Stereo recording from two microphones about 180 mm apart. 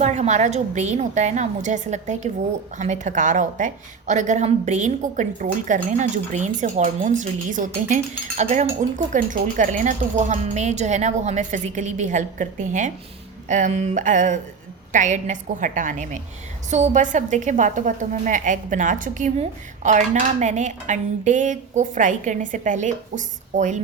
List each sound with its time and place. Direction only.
0.0 s a woman's voice: 40° right (ahead or behind)